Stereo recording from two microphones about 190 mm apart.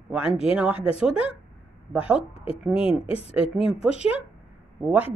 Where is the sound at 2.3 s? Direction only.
30° left (ahead or behind).